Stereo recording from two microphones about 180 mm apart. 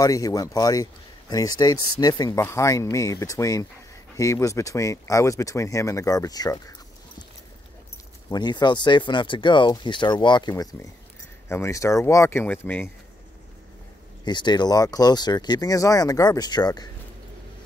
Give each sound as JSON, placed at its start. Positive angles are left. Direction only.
{"t": 0.0, "sound": "speech", "side_deg": 20}
{"t": 8.3, "sound": "speech", "side_deg": 25}
{"t": 14.2, "sound": "speech", "side_deg": 25}